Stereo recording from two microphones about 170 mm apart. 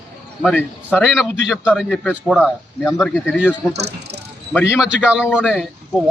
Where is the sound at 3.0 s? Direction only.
Centre (ahead or behind).